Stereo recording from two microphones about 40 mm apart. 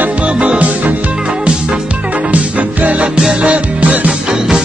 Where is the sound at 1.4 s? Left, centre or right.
Right.